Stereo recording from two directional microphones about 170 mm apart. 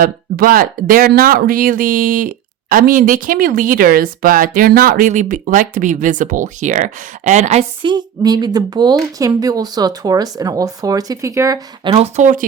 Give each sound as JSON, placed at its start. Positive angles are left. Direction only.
{"t": 0.0, "sound": "speech", "side_deg": -60}
{"t": 7.8, "sound": "speech", "side_deg": -25}
{"t": 11.9, "sound": "speech", "side_deg": -40}